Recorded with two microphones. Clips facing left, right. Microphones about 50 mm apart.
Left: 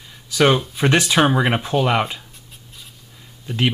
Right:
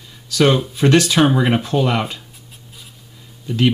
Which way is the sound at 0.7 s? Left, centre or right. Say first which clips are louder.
Right 3 dB; centre.